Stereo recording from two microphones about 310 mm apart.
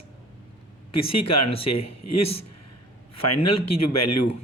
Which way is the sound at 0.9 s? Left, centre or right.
Left.